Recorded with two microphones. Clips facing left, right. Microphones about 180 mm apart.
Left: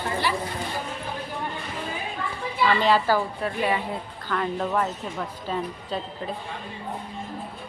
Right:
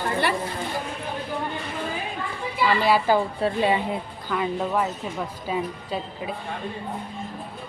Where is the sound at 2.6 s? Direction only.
10° right (ahead or behind).